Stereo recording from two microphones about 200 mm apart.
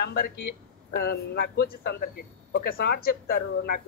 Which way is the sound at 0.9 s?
55° left (ahead or behind).